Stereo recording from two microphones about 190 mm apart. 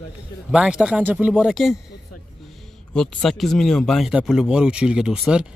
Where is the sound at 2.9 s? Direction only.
5° left (ahead or behind).